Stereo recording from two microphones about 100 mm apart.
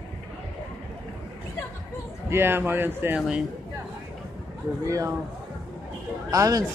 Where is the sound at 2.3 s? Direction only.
20° right (ahead or behind).